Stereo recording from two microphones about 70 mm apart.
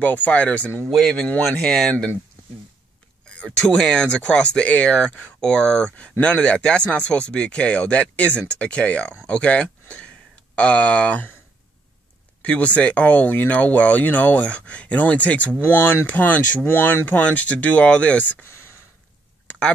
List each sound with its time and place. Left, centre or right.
0.0 s speech: left
0.8 s speech: centre
3.3 s speech: centre
12.4 s speech: centre
18.4 s a sound: left